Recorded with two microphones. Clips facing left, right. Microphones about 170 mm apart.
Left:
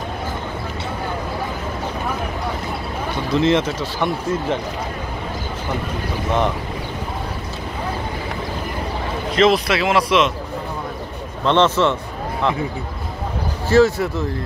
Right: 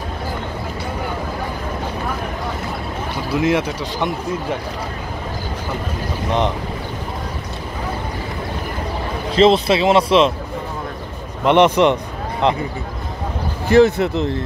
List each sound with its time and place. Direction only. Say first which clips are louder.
3.3 s speech: left 1 dB; 10° right (ahead or behind)
9.3 s speech: right 3 dB; 30° right (ahead or behind)
11.4 s speech: right 3 dB; 15° right (ahead or behind)
13.7 s speech: right 2 dB; 20° right (ahead or behind)